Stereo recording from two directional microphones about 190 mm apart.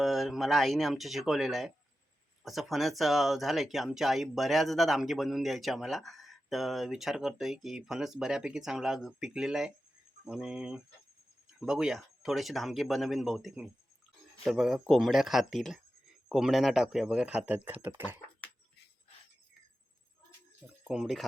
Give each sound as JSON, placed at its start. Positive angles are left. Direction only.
{"t": 0.0, "sound": "speech", "side_deg": 0}
{"t": 20.8, "sound": "speech", "side_deg": 0}